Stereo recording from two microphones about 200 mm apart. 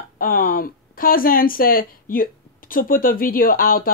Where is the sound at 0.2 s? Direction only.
45° left (ahead or behind).